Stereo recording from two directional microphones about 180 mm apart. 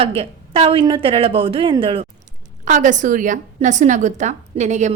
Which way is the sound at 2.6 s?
45° right (ahead or behind).